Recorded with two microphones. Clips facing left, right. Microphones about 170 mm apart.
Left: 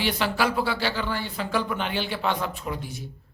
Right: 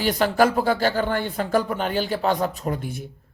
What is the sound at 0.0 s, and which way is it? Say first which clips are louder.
Speech: right 6 dB; 45° right (ahead or behind).